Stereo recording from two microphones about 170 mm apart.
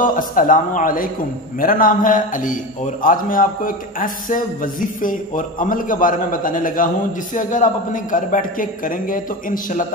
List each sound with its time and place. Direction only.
0.0 s a man's voice: 50° left (ahead or behind)